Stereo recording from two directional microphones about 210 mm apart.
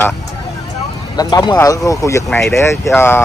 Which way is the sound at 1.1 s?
20° left (ahead or behind).